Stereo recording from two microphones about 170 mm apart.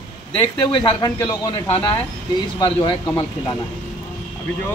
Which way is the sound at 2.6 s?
25° left (ahead or behind).